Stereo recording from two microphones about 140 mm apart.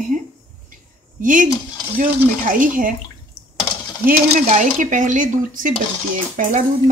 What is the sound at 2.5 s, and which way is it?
Speech, 75° right (ahead or behind).